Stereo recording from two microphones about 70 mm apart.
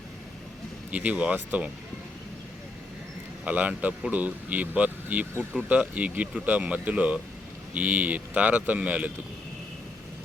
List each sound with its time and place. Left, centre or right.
0.9 s speech: centre
3.4 s speech: right